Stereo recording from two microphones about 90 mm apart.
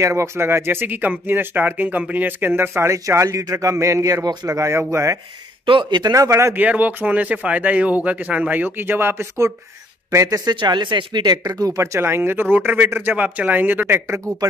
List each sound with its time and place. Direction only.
0.0 s speech: 35° right (ahead or behind)
5.7 s speech: 65° right (ahead or behind)
6.1 s speech: 35° right (ahead or behind)
6.5 s speech: 20° right (ahead or behind)
10.2 s speech: 45° right (ahead or behind)
10.5 s speech: 60° right (ahead or behind)
11.4 s speech: 40° right (ahead or behind)